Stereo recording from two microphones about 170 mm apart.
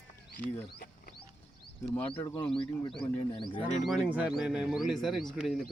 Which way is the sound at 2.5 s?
30° left (ahead or behind).